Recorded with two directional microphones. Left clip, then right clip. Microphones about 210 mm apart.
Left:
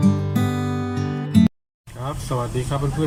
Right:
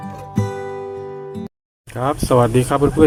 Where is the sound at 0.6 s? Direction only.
Centre (ahead or behind).